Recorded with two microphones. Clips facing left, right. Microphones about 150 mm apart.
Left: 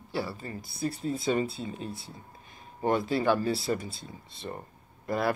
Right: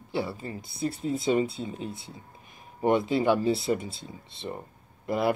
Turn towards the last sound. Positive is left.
turn(degrees=-20)  # may be behind; listen again after turning